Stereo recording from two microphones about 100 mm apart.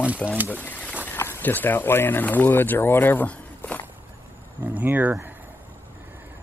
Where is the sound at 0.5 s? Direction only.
15° left (ahead or behind).